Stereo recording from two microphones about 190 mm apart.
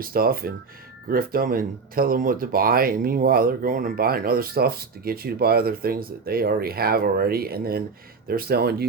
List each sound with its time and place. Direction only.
0.0 s speech: 50° right (ahead or behind)